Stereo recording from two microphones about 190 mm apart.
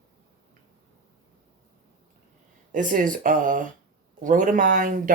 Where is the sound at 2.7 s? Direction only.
45° right (ahead or behind).